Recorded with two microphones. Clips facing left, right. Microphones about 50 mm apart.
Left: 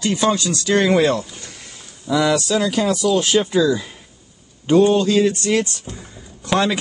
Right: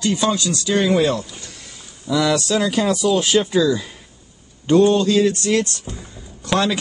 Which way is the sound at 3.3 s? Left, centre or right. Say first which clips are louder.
Even; centre.